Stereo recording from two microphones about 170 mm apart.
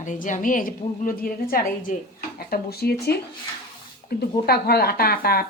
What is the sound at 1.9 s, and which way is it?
Speech, 45° left (ahead or behind).